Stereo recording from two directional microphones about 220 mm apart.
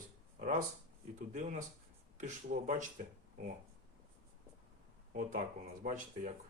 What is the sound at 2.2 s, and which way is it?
Speech, 35° right (ahead or behind).